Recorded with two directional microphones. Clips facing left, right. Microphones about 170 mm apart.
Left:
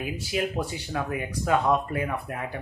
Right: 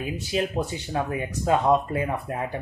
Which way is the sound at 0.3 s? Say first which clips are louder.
Right 2 dB; 30° right (ahead or behind).